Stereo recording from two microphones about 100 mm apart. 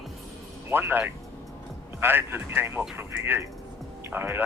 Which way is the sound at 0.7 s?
20° right (ahead or behind).